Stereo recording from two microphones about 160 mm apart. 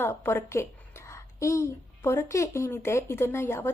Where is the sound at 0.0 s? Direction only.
15° left (ahead or behind).